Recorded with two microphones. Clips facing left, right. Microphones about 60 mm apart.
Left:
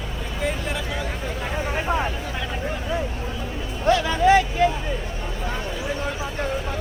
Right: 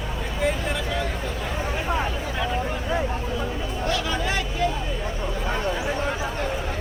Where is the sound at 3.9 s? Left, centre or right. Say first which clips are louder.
Left 10 dB; left.